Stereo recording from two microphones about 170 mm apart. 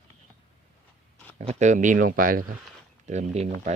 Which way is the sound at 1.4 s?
45° right (ahead or behind).